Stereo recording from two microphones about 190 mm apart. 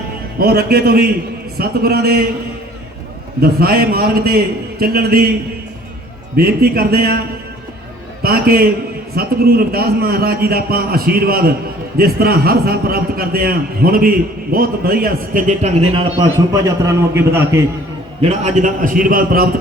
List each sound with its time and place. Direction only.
0.3 s a man's voice: 55° right (ahead or behind)
3.4 s a man's voice: 50° right (ahead or behind)
6.3 s a man's voice: 55° right (ahead or behind)
8.2 s a man's voice: 50° right (ahead or behind); by 16.2 s 30° right (ahead or behind)
16.5 s a man's voice: 15° right (ahead or behind)
18.2 s a man's voice: 35° right (ahead or behind)